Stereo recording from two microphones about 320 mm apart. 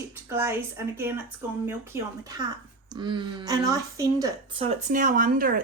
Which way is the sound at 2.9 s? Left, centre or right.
Centre.